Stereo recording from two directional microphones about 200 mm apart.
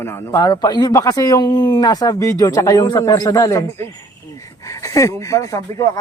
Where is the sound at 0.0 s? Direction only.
15° left (ahead or behind).